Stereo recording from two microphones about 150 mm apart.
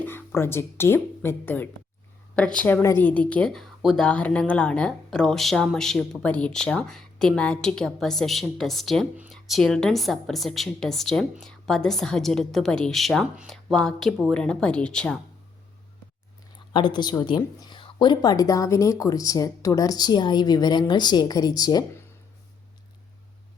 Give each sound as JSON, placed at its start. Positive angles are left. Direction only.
{"t": 0.0, "sound": "speech", "side_deg": 15}
{"t": 16.7, "sound": "a woman's voice", "side_deg": 30}